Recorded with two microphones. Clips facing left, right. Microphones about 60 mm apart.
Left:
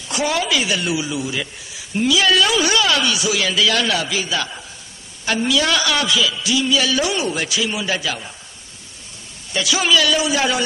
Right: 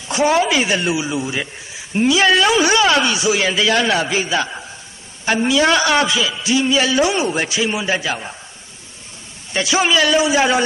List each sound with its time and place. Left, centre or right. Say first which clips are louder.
0.1 s speech: right 5 dB; right
9.5 s speech: right 1 dB; right